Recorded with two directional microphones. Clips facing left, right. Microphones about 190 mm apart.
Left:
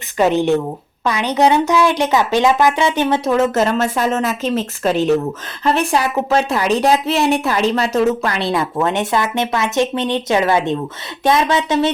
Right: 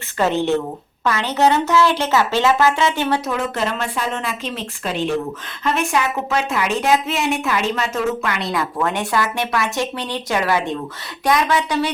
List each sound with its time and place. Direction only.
0.2 s speech: 15° left (ahead or behind)
3.2 s a woman's voice: 45° left (ahead or behind); by 11.9 s 20° left (ahead or behind)